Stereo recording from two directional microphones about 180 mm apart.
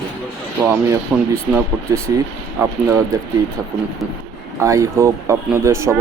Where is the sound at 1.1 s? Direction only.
5° right (ahead or behind).